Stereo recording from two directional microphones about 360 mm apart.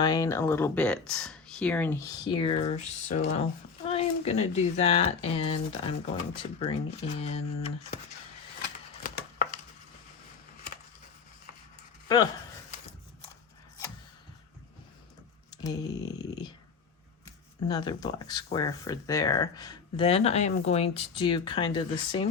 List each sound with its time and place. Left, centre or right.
0.0 s speech: centre
12.0 s speech: centre
15.4 s a sound: centre
17.2 s speech: centre